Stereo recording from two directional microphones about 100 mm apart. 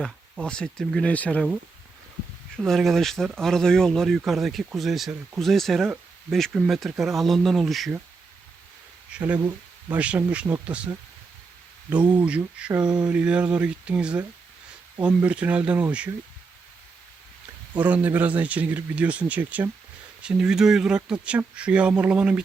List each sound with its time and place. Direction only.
0.0 s speech: 10° left (ahead or behind)
2.6 s speech: centre (ahead or behind)
9.1 s speech: 15° right (ahead or behind)
12.8 s speech: 45° right (ahead or behind)
13.1 s speech: 10° right (ahead or behind)
17.7 s speech: 15° right (ahead or behind)